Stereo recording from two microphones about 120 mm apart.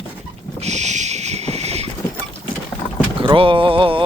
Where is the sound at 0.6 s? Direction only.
70° right (ahead or behind).